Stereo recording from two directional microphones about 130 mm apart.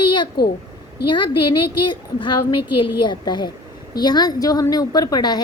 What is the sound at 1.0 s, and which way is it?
A woman's voice, 35° left (ahead or behind).